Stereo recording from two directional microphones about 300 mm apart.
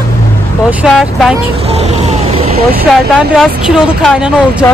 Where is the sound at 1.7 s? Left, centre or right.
Centre.